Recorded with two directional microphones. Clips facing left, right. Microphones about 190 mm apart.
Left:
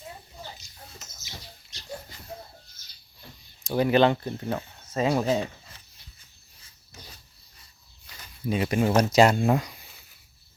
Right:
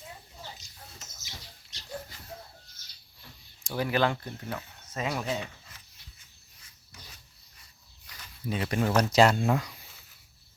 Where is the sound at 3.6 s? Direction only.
20° left (ahead or behind).